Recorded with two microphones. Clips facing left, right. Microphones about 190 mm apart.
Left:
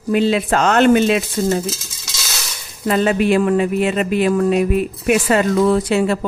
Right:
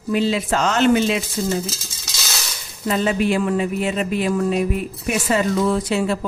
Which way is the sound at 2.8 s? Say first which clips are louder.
Left 4 dB; 60° left (ahead or behind).